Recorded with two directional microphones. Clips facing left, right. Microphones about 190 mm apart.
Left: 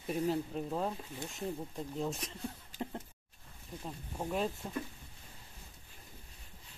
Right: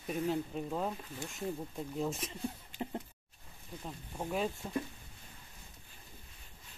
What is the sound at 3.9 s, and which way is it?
Speech, centre (ahead or behind).